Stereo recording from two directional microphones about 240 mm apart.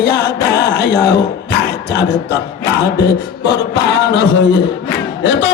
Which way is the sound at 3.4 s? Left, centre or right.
Left.